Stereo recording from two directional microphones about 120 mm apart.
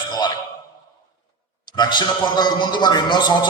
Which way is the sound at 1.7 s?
35° left (ahead or behind).